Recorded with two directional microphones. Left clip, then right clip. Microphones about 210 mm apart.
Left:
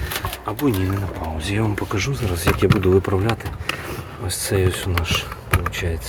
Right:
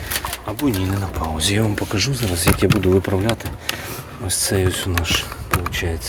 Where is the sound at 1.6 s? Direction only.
10° right (ahead or behind).